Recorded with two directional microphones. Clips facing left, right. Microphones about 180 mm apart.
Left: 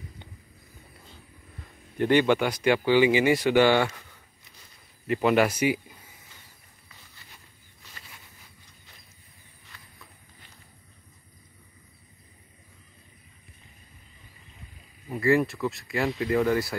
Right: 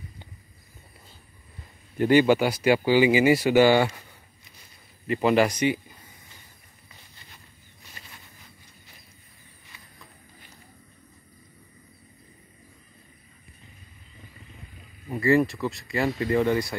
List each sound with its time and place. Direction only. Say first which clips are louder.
2.0 s speech: right 3 dB; 10° right (ahead or behind)
5.0 s speech: right 1 dB; centre (ahead or behind)
15.0 s speech: right 2 dB; centre (ahead or behind)